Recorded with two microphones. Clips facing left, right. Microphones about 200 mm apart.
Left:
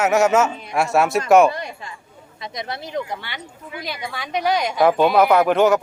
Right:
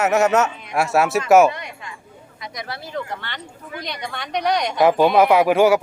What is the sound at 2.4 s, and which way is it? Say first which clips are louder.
Speech: left 3 dB; 25° left (ahead or behind).